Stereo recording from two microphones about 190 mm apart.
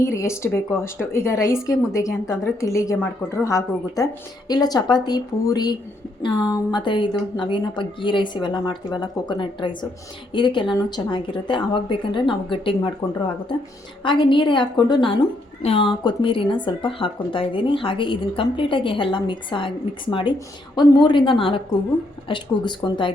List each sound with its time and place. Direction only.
0.0 s a woman's voice: 15° left (ahead or behind)